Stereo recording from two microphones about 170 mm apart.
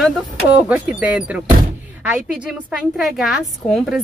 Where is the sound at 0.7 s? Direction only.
10° right (ahead or behind).